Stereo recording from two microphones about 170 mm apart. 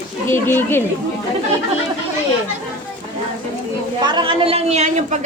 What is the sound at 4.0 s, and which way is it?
A woman's voice, 25° right (ahead or behind).